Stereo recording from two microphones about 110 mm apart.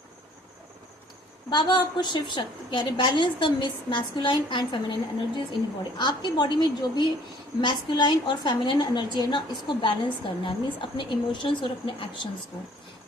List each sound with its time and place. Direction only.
1.5 s a woman's voice: 45° left (ahead or behind)
6.0 s a woman's voice: 40° left (ahead or behind)